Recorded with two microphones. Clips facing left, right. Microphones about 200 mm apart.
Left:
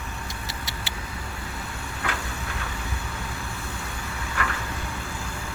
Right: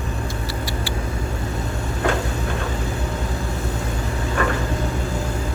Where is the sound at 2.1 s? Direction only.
40° right (ahead or behind).